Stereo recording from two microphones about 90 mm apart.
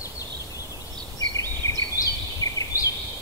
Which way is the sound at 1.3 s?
40° left (ahead or behind).